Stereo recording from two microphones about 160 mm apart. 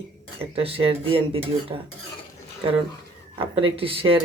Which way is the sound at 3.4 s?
35° right (ahead or behind).